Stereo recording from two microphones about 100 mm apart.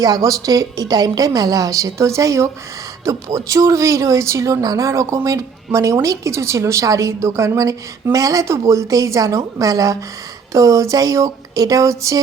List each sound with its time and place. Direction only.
0.0 s speech: 40° right (ahead or behind)